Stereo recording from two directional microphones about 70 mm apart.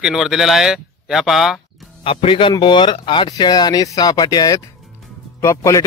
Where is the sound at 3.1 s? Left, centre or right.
Left.